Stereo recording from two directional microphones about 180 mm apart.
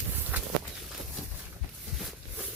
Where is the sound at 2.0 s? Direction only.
Centre (ahead or behind).